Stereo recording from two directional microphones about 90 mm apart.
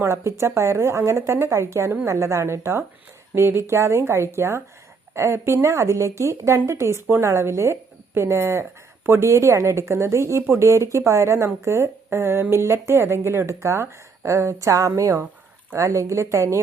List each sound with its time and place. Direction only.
0.0 s a woman's voice: 30° right (ahead or behind)